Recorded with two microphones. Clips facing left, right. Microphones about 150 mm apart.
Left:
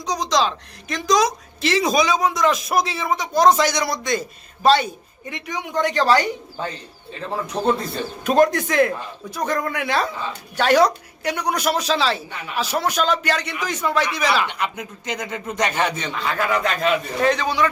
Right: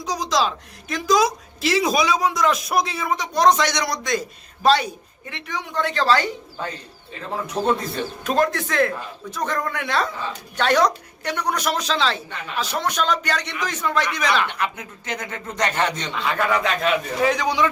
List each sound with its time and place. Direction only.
0.0 s a man's voice: centre (ahead or behind)
5.3 s speech: 15° left (ahead or behind)
8.2 s speech: 20° left (ahead or behind)
14.4 s a man's voice: 15° left (ahead or behind); by 17.7 s 15° right (ahead or behind)